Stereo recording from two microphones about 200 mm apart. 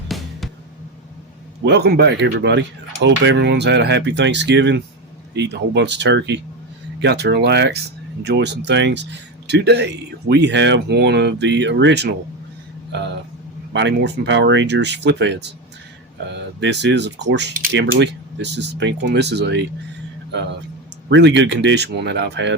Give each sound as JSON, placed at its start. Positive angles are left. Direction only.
{"t": 0.1, "sound": "music", "side_deg": 0}
{"t": 1.6, "sound": "speech", "side_deg": -55}
{"t": 13.7, "sound": "speech", "side_deg": -60}
{"t": 21.1, "sound": "speech", "side_deg": -60}